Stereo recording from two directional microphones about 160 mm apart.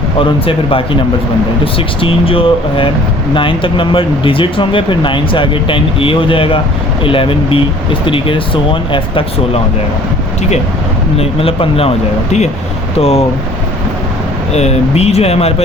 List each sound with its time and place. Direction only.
0.2 s speech: 35° left (ahead or behind)
2.0 s speech: 35° left (ahead or behind)
11.2 s speech: 35° left (ahead or behind)
13.0 s speech: 40° left (ahead or behind)
14.5 s speech: 40° left (ahead or behind)